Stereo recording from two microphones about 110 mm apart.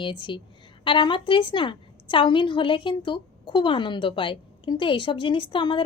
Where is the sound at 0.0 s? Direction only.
50° left (ahead or behind).